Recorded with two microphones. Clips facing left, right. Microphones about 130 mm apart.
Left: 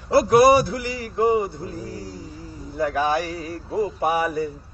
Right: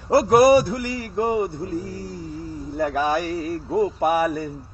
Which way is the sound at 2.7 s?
55° right (ahead or behind).